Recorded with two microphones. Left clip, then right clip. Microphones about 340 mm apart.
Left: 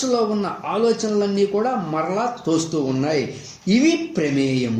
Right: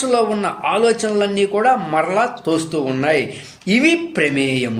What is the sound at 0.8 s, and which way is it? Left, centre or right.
Speech, right.